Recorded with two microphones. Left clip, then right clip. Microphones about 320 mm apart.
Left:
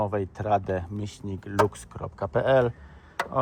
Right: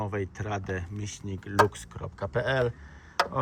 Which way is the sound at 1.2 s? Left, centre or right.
Centre.